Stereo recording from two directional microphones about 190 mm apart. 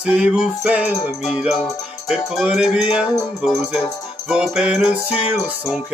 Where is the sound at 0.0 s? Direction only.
5° right (ahead or behind).